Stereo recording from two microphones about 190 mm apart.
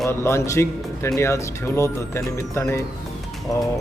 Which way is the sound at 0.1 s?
15° left (ahead or behind).